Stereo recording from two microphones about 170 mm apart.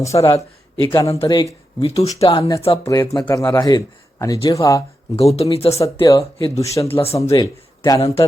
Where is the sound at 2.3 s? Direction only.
20° left (ahead or behind).